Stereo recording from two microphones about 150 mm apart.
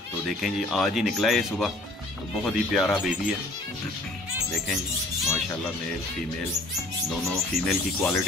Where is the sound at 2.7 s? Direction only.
Centre (ahead or behind).